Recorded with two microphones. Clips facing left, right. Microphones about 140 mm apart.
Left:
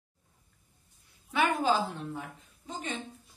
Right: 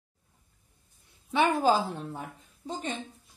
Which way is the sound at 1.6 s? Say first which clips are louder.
Right 3 dB; 40° right (ahead or behind).